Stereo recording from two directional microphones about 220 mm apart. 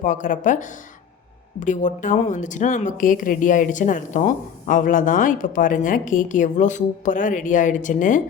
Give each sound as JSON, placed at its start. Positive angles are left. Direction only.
{"t": 0.0, "sound": "a woman's voice", "side_deg": 35}